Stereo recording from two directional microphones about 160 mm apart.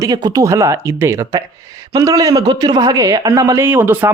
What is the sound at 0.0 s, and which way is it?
Speech, 25° right (ahead or behind).